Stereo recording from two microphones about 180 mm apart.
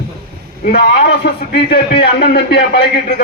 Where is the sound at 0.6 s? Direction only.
65° left (ahead or behind).